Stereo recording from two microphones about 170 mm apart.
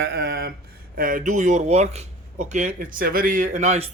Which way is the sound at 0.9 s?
55° right (ahead or behind).